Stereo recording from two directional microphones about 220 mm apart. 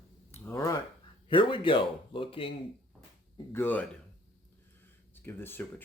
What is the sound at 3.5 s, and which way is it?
Speech, 10° left (ahead or behind).